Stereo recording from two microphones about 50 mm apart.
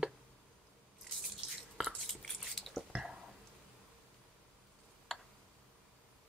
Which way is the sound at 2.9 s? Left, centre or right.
Centre.